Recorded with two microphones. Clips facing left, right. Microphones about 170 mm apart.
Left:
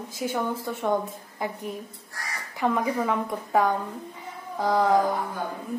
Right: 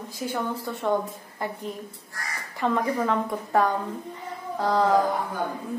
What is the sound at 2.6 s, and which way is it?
A woman's voice, 10° left (ahead or behind).